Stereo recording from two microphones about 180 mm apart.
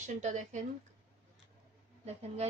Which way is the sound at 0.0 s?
40° right (ahead or behind).